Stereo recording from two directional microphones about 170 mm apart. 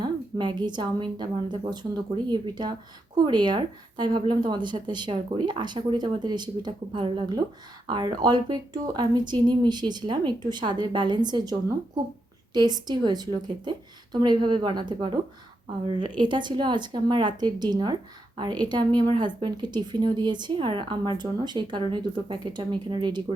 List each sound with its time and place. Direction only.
0.0 s a woman's voice: 25° right (ahead or behind)
12.5 s a woman's voice: 25° right (ahead or behind)